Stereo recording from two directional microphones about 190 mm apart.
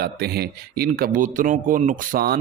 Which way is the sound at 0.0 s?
55° right (ahead or behind).